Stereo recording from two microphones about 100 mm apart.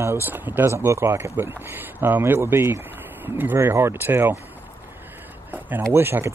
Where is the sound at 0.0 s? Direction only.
25° right (ahead or behind).